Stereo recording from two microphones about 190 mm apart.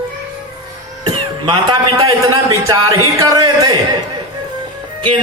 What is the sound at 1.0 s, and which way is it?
A man's voice, 25° right (ahead or behind).